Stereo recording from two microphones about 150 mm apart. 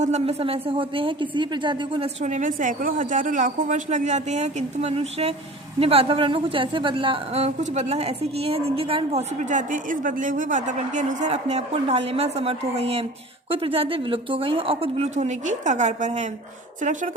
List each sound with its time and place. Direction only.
0.0 s a woman's voice: 45° right (ahead or behind)
2.2 s a woman's voice: 55° right (ahead or behind); by 9.2 s 40° right (ahead or behind)
9.5 s a woman's voice: 60° right (ahead or behind)